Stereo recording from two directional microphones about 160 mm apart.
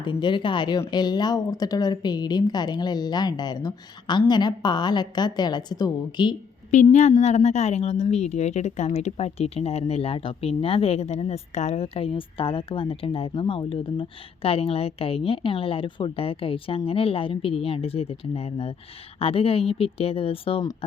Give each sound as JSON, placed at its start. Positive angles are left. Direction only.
{"t": 0.0, "sound": "speech", "side_deg": 30}
{"t": 6.7, "sound": "a woman's voice", "side_deg": 50}